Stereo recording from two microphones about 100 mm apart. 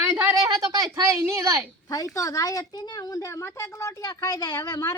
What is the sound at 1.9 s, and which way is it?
A woman's voice, 35° left (ahead or behind).